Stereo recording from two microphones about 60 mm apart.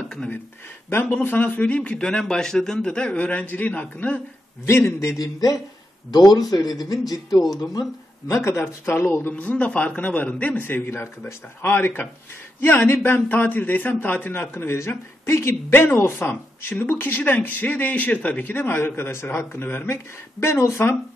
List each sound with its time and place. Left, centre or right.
0.8 s a man's voice: left
4.6 s speech: left
5.2 s speech: left
6.6 s speech: left
8.3 s speech: left
9.3 s a man's voice: left
14.3 s speech: left
20.3 s speech: left